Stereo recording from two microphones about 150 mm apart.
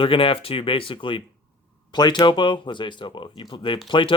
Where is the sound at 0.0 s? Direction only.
35° left (ahead or behind).